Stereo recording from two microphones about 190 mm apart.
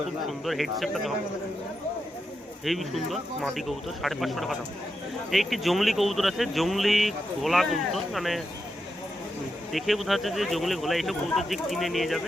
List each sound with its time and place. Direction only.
0.3 s speech: centre (ahead or behind)
2.6 s speech: centre (ahead or behind)
9.7 s speech: centre (ahead or behind)